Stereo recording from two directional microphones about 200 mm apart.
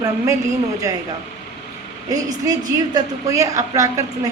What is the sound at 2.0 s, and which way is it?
Speech, 20° right (ahead or behind).